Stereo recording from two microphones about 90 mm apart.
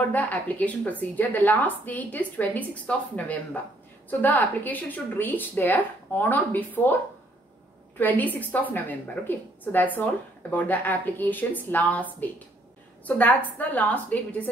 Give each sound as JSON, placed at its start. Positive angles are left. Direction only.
{"t": 0.1, "sound": "a woman's voice", "side_deg": 20}
{"t": 8.0, "sound": "a woman's voice", "side_deg": 20}